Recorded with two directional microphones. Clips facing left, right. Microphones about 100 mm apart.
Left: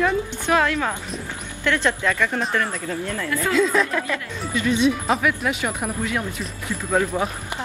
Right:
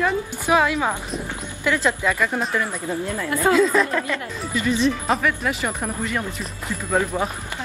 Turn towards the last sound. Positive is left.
turn(degrees=5)  # may be behind; listen again after turning